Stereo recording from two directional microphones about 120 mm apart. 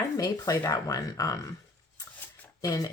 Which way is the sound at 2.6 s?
30° left (ahead or behind).